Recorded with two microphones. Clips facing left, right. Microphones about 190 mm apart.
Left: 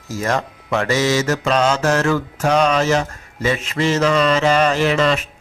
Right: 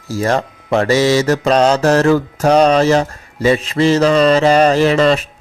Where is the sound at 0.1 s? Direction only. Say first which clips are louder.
Right 5 dB; 30° right (ahead or behind).